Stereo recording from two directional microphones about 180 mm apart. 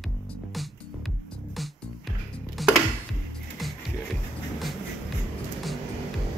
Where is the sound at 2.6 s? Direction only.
Centre (ahead or behind).